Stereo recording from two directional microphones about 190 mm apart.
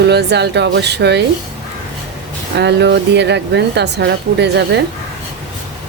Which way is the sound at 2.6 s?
65° right (ahead or behind).